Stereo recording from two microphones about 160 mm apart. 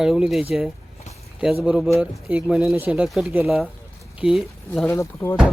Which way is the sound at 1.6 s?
Centre (ahead or behind).